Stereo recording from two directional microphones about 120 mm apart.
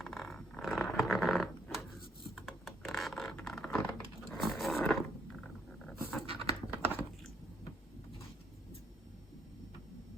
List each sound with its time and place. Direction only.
0.0 s a sound: 5° left (ahead or behind)
4.3 s roaring cats: centre (ahead or behind)
5.8 s pant: centre (ahead or behind)
6.2 s pant: 55° right (ahead or behind)